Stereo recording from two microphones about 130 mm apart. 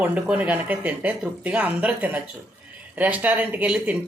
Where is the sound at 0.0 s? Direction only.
10° right (ahead or behind).